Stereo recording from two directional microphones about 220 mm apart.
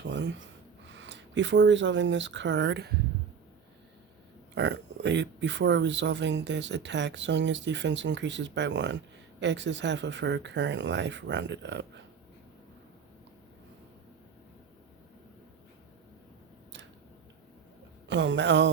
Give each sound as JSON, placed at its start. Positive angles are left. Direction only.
{"t": 0.0, "sound": "speech", "side_deg": -55}
{"t": 4.5, "sound": "speech", "side_deg": -50}
{"t": 18.1, "sound": "a sound", "side_deg": -55}